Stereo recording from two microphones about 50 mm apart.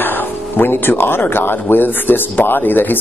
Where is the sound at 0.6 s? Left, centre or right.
Left.